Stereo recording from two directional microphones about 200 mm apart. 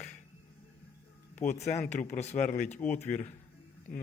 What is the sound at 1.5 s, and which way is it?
Speech, 35° left (ahead or behind).